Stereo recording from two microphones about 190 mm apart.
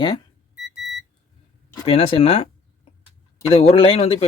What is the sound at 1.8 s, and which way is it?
Speech, 30° left (ahead or behind).